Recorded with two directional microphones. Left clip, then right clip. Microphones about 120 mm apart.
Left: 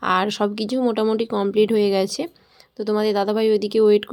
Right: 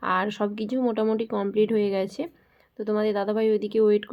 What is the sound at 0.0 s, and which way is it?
Speech, 50° left (ahead or behind).